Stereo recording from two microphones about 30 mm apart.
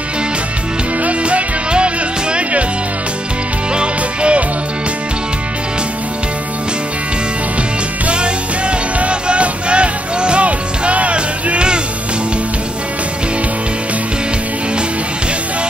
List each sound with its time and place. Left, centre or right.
1.0 s music: right
3.7 s music: right
8.1 s music: right